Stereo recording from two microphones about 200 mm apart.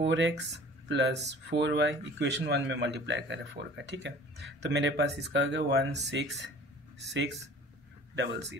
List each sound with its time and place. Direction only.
0.0 s speech: 65° right (ahead or behind)
8.2 s speech: 60° right (ahead or behind)